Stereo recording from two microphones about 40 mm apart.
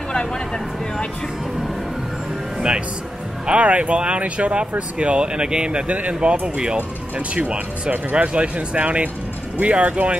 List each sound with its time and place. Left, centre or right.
3.4 s speech: right
5.9 s speech: right
6.4 s speech: right